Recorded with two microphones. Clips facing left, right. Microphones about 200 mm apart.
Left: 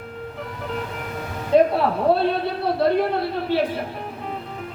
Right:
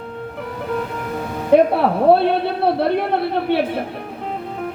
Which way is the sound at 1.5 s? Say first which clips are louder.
Right 3 dB; 60° right (ahead or behind).